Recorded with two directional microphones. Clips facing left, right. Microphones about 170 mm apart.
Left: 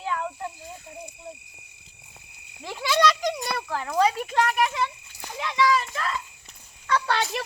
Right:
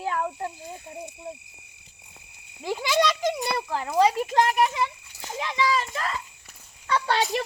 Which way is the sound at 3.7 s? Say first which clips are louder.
Right 1 dB; 15° right (ahead or behind).